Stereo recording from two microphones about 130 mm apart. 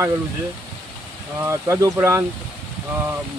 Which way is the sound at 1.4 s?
20° right (ahead or behind).